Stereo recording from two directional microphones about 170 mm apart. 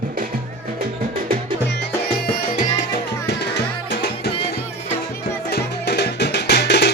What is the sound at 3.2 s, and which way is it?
Music, 80° left.